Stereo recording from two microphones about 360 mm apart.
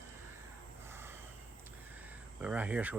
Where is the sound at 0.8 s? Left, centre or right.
Centre.